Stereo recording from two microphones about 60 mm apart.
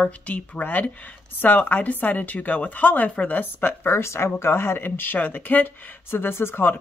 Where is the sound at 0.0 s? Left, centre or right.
Left.